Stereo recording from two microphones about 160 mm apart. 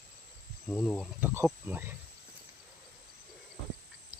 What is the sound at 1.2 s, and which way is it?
Speech, 15° right (ahead or behind).